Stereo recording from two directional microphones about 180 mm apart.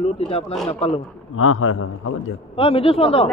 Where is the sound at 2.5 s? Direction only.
30° left (ahead or behind).